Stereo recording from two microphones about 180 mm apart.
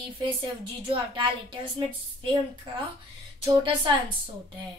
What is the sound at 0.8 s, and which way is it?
Speech, 30° right (ahead or behind).